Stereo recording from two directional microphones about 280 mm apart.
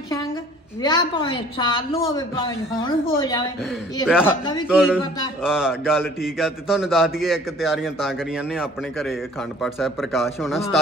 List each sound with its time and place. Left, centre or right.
0.8 s a woman's voice: centre
4.6 s a man's voice: centre